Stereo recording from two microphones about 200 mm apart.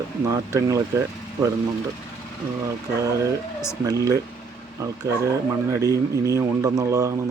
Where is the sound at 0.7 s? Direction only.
15° right (ahead or behind).